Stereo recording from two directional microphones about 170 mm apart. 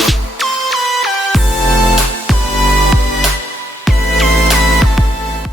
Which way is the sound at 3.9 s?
Centre (ahead or behind).